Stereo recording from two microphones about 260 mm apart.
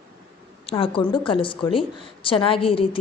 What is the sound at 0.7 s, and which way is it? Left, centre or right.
A woman's voice, left.